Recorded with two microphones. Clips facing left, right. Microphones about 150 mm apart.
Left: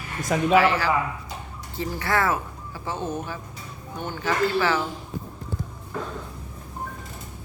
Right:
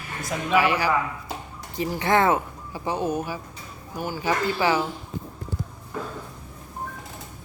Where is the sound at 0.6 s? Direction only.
15° right (ahead or behind).